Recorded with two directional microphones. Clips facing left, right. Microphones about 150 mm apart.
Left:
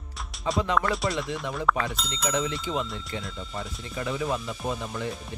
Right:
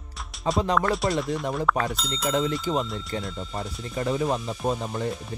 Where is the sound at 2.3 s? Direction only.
40° right (ahead or behind).